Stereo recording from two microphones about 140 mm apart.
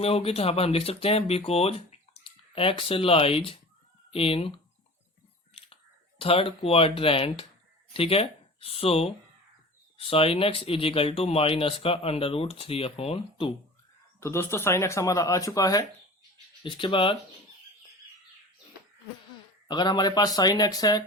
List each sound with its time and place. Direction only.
0.0 s speech: 45° left (ahead or behind)
6.1 s speech: 40° left (ahead or behind)
14.2 s speech: 20° left (ahead or behind)
16.6 s speech: 35° left (ahead or behind)
19.6 s speech: 30° left (ahead or behind)